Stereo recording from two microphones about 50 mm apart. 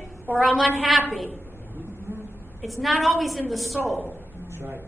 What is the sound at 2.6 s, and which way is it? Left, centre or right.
A woman's voice, centre.